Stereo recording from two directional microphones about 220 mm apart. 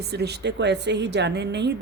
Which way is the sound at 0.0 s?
45° right (ahead or behind).